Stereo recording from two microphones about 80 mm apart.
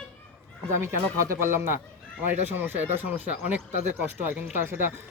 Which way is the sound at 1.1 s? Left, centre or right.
Right.